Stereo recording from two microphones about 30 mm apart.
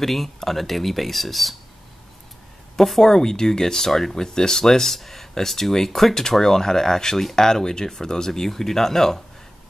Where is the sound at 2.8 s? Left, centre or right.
Centre.